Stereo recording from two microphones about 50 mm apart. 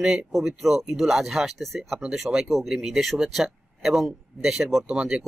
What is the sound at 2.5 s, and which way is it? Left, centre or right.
Speech, centre.